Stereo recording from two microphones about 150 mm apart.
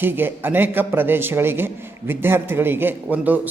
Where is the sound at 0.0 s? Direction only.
15° right (ahead or behind).